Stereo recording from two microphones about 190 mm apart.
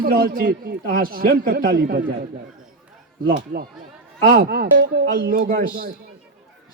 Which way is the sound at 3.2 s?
55° right (ahead or behind).